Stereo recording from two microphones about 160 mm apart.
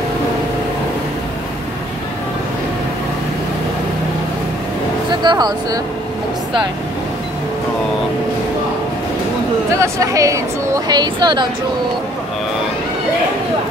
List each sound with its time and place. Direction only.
5.2 s speech: 25° right (ahead or behind)
9.8 s speech: 20° right (ahead or behind)